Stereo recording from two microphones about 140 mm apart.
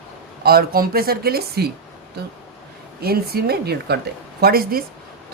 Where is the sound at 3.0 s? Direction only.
90° right.